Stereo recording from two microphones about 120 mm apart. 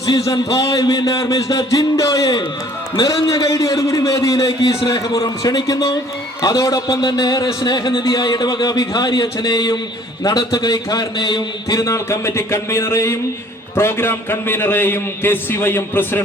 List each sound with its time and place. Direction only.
0.0 s a man's voice: 30° left (ahead or behind)